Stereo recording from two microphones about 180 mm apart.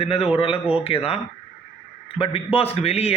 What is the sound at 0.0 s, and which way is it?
Speech, 35° left (ahead or behind).